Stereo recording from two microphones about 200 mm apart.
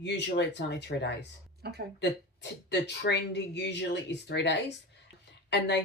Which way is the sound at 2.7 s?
60° left (ahead or behind).